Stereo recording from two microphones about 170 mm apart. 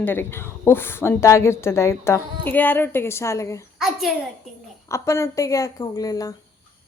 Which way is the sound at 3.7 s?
Centre (ahead or behind).